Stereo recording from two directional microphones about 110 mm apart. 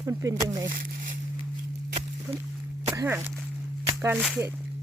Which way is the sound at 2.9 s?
25° right (ahead or behind).